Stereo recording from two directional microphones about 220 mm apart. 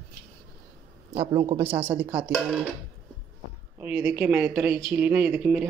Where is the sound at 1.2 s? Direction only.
20° right (ahead or behind).